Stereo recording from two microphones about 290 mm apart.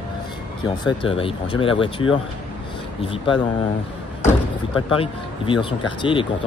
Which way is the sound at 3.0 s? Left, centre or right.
Centre.